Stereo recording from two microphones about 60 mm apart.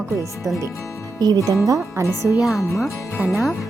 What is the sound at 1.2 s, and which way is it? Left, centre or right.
Speech, right.